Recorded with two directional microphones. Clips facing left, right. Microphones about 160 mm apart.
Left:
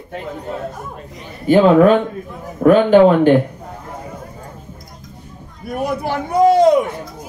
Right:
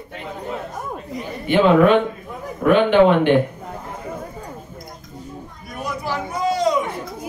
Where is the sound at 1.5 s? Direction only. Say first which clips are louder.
Left 4 dB; 40° left (ahead or behind).